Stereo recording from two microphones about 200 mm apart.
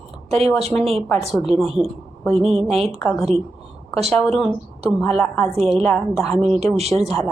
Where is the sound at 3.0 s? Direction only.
5° left (ahead or behind).